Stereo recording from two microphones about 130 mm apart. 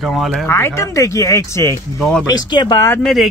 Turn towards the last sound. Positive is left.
turn(degrees=0)  # may be behind; listen again after turning